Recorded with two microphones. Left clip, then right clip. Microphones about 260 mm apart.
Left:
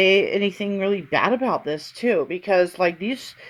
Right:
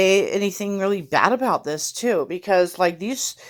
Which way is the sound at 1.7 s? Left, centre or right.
Right.